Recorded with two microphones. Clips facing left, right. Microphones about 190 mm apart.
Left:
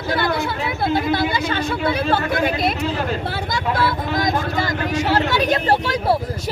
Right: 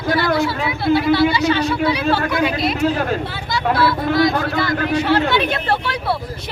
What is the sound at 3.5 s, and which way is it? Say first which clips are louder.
Speech: right 4 dB; 45° left (ahead or behind).